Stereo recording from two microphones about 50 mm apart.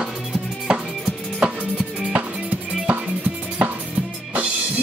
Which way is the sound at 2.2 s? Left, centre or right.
Right.